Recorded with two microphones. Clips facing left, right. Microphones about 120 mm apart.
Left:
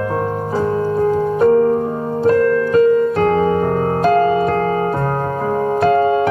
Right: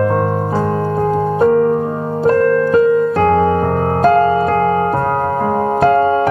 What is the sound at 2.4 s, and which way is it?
Music, 55° right (ahead or behind).